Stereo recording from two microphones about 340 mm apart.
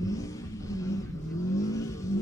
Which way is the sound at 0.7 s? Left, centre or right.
Centre.